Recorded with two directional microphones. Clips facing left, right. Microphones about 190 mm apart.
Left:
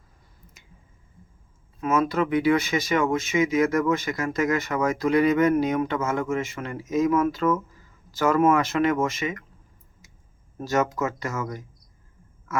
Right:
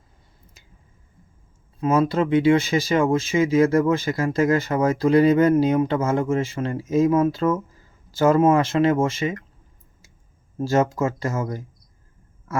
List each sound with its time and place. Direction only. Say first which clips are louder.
1.8 s speech: right 3 dB; 30° right (ahead or behind)
10.0 s clicking: even; 30° right (ahead or behind)
10.6 s speech: right 4 dB; 30° right (ahead or behind)
12.5 s a sound: right 2 dB; 35° right (ahead or behind)